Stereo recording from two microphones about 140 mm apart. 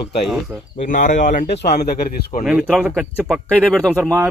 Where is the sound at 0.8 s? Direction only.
70° left (ahead or behind).